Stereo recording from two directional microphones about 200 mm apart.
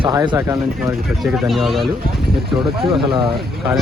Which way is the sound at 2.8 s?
25° right (ahead or behind).